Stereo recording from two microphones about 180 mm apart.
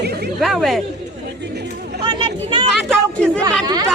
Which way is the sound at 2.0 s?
25° right (ahead or behind).